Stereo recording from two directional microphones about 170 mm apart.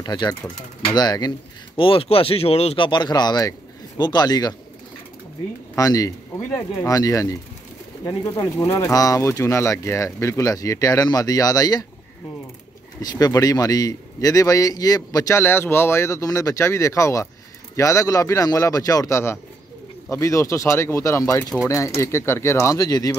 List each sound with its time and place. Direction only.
0.0 s a man's voice: 25° left (ahead or behind)
5.8 s a man's voice: 20° left (ahead or behind)
13.0 s a man's voice: 25° left (ahead or behind)